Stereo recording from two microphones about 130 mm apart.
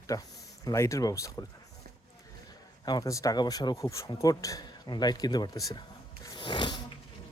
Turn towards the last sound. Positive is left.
turn(degrees=35)  # may be behind; listen again after turning